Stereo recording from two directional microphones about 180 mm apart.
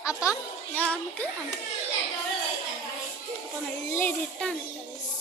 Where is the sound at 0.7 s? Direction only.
10° left (ahead or behind).